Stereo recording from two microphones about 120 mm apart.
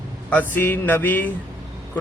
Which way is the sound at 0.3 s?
15° left (ahead or behind).